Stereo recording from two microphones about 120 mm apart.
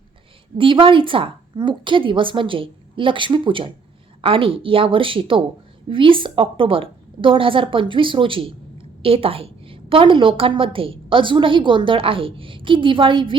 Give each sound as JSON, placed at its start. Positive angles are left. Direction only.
{"t": 0.6, "sound": "a woman's voice", "side_deg": -45}